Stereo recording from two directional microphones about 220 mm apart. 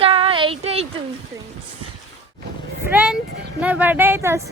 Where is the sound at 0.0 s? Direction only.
25° right (ahead or behind).